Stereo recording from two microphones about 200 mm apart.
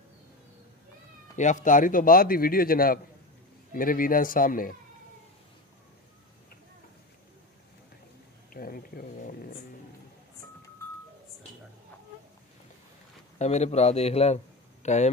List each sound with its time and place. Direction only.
1.3 s a man's voice: 40° left (ahead or behind)
8.5 s a sound: 45° left (ahead or behind)
13.4 s a man's voice: 35° left (ahead or behind)